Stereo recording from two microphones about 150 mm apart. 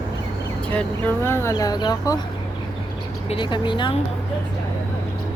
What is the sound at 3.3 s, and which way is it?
Speech, 30° left (ahead or behind).